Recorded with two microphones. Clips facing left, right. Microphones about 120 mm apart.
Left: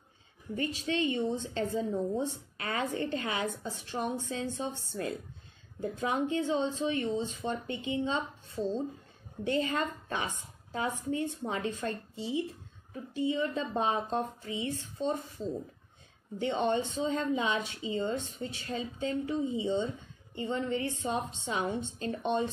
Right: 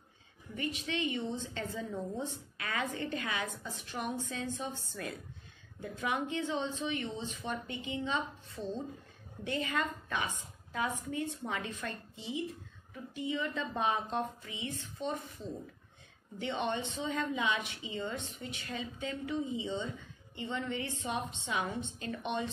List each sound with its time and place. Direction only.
0.6 s a woman's voice: 30° left (ahead or behind)